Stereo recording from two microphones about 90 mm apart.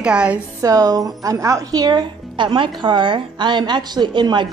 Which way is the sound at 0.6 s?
40° right (ahead or behind).